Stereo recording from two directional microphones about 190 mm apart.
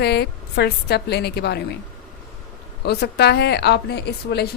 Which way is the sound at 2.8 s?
60° left (ahead or behind).